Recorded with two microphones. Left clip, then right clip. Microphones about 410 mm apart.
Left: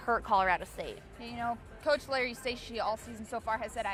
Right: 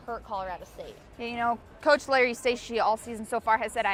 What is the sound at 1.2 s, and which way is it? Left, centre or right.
Speech, right.